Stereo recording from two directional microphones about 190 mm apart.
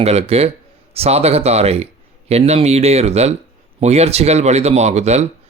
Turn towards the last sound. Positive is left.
turn(degrees=-35)  # may be behind; listen again after turning